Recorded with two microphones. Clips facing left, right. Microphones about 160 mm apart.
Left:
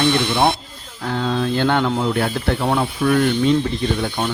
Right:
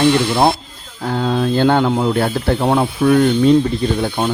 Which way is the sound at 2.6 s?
25° right (ahead or behind).